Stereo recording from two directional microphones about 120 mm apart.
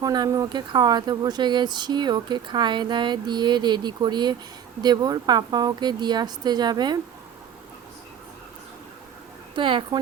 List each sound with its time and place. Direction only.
0.0 s speech: 30° right (ahead or behind)
9.6 s speech: 45° right (ahead or behind)